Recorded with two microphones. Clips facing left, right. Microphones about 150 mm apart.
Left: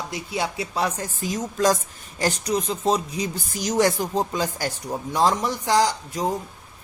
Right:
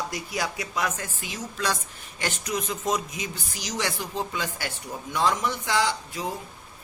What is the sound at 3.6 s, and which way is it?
Speech, 45° left (ahead or behind).